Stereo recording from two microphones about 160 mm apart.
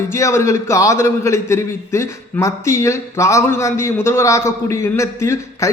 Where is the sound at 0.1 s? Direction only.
20° left (ahead or behind).